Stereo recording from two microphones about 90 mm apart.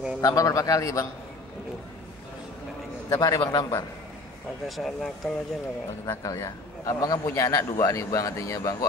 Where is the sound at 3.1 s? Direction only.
40° left (ahead or behind).